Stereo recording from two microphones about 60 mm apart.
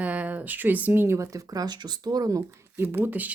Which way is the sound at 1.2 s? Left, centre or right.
Right.